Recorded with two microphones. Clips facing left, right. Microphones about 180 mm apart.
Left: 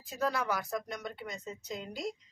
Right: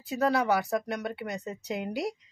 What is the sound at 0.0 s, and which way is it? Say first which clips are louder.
A woman's voice: right 7 dB; 65° right (ahead or behind).